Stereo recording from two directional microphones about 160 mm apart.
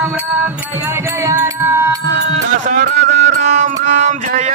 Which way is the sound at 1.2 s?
15° right (ahead or behind).